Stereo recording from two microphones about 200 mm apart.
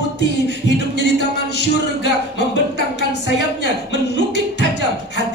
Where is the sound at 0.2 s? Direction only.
55° left (ahead or behind).